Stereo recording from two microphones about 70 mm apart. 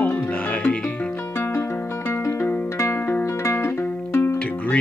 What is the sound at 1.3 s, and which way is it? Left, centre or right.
Music, left.